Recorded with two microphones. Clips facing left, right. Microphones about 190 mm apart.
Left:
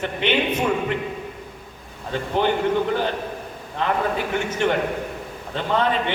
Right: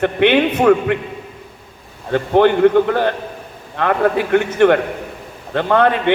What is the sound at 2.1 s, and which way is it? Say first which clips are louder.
A man's voice: right 9 dB; 60° right (ahead or behind).